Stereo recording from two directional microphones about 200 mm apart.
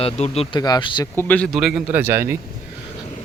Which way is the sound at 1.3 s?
5° left (ahead or behind).